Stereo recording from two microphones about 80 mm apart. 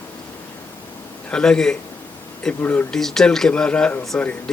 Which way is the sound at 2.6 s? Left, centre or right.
Left.